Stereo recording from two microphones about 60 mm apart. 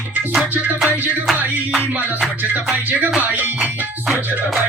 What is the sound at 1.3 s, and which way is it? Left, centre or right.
Music, centre.